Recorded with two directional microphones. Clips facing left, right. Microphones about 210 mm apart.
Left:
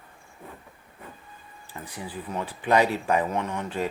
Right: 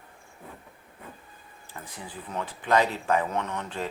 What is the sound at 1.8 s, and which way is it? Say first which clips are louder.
Speech: left 4 dB; 15° left (ahead or behind).